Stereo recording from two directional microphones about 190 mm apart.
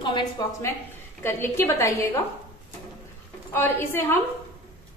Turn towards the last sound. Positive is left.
turn(degrees=10)  # may be behind; listen again after turning